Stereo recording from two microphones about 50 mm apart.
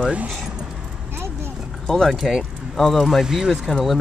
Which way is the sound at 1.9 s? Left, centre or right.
Centre.